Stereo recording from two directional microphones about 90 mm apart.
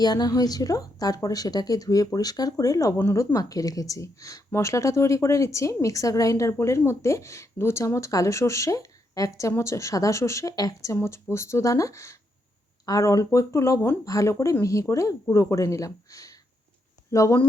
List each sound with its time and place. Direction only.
0.0 s a woman's voice: 50° left (ahead or behind)
3.0 s speech: 25° left (ahead or behind)
10.9 s speech: 30° left (ahead or behind)